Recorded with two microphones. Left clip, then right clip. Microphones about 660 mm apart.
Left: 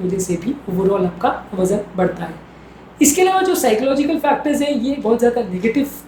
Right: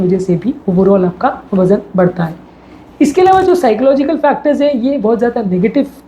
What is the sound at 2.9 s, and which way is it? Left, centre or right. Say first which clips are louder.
Speech: right 6 dB; right.